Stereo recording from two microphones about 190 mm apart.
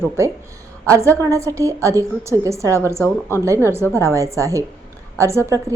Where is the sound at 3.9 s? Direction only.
15° right (ahead or behind).